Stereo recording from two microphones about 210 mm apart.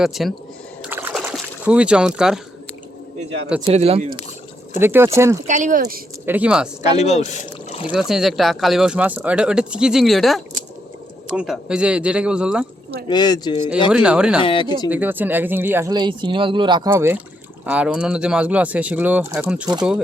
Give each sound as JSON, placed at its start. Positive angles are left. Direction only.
{"t": 0.0, "sound": "speech", "side_deg": 0}
{"t": 0.8, "sound": "a sound", "side_deg": -10}
{"t": 3.6, "sound": "speech", "side_deg": -30}
{"t": 4.8, "sound": "speech", "side_deg": -10}
{"t": 5.5, "sound": "speech", "side_deg": -35}
{"t": 6.2, "sound": "speech", "side_deg": -5}
{"t": 6.9, "sound": "speech", "side_deg": 30}
{"t": 7.9, "sound": "speech", "side_deg": 0}
{"t": 13.1, "sound": "speech", "side_deg": 20}
{"t": 13.9, "sound": "speech", "side_deg": -5}
{"t": 14.4, "sound": "speech", "side_deg": 25}
{"t": 14.8, "sound": "speech", "side_deg": -10}